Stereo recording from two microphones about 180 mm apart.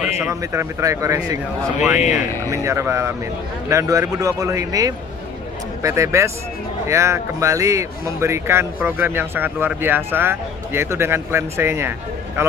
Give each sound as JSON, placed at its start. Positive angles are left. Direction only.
{"t": 0.3, "sound": "speech", "side_deg": -15}
{"t": 2.0, "sound": "speech", "side_deg": 40}
{"t": 2.5, "sound": "speech", "side_deg": -15}